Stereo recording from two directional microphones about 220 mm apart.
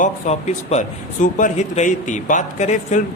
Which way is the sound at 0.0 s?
30° left (ahead or behind).